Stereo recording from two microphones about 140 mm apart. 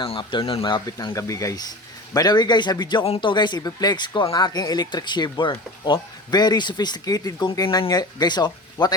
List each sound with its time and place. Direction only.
0.0 s speech: 35° left (ahead or behind)
0.6 s speech: 25° left (ahead or behind)